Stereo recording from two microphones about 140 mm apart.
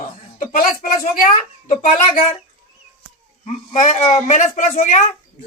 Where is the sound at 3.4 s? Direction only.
55° left (ahead or behind).